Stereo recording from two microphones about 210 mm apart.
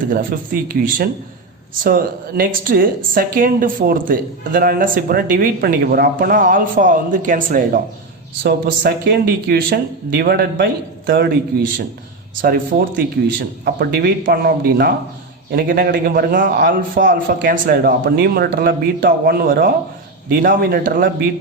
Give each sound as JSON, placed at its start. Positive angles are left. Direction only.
{"t": 0.1, "sound": "speech", "side_deg": -40}